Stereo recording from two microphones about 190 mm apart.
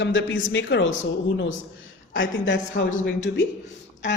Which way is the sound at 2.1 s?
75° left (ahead or behind).